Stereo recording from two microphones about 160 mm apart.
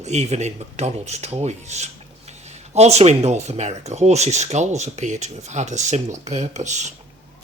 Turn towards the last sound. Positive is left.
turn(degrees=-50)  # may be behind; listen again after turning